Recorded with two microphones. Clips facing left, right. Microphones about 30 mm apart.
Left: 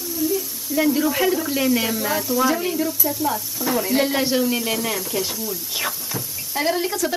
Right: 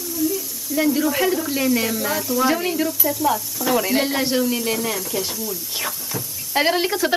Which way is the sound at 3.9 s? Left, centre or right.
Centre.